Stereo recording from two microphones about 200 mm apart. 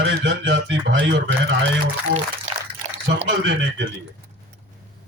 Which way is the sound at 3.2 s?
65° right (ahead or behind).